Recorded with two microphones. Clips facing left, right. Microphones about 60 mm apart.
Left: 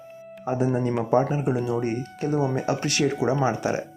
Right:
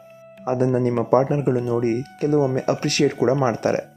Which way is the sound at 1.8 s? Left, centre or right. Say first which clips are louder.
Right 5 dB; right.